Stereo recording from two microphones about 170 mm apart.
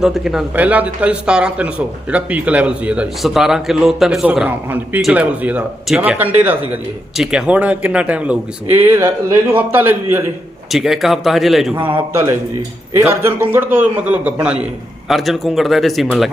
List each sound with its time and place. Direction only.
0.0 s a man's voice: centre (ahead or behind)
10.7 s a man's voice: centre (ahead or behind)
12.1 s a man's voice: 15° right (ahead or behind)